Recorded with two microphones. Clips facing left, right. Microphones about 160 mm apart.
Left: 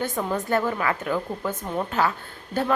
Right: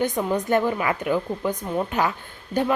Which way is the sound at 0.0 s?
15° right (ahead or behind).